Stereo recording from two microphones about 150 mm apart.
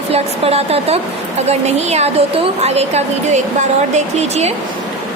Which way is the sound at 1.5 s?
45° right (ahead or behind).